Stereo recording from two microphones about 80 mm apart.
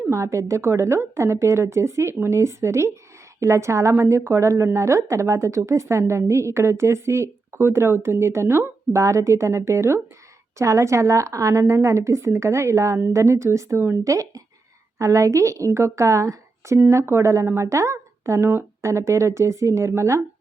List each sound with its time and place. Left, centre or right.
0.1 s speech: right